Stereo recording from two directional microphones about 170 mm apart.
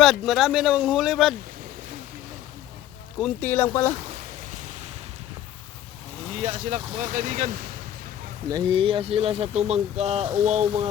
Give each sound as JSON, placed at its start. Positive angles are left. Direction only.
{"t": 0.0, "sound": "speech", "side_deg": 0}
{"t": 3.2, "sound": "speech", "side_deg": 5}
{"t": 4.1, "sound": "a sound", "side_deg": -45}
{"t": 6.4, "sound": "speech", "side_deg": -50}
{"t": 8.4, "sound": "speech", "side_deg": -25}